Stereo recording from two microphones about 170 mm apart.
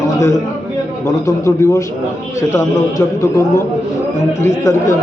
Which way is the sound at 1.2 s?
15° left (ahead or behind).